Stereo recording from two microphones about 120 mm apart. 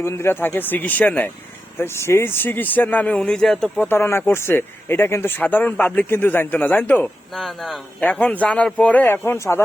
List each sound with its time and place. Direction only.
0.0 s speech: 20° left (ahead or behind); by 3.8 s 5° left (ahead or behind)
3.8 s speech: 20° left (ahead or behind)
7.3 s speech: centre (ahead or behind)
8.0 s speech: 10° left (ahead or behind)